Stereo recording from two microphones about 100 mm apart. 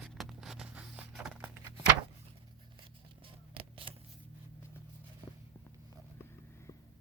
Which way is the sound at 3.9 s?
60° right (ahead or behind).